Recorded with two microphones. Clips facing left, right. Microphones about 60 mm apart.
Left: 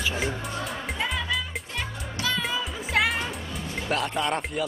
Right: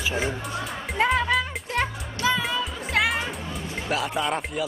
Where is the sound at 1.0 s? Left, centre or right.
Right.